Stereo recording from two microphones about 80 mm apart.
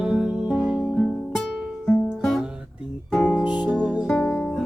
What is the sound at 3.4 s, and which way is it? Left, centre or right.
Music, centre.